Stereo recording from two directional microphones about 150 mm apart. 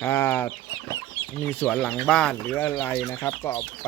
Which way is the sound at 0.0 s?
15° left (ahead or behind).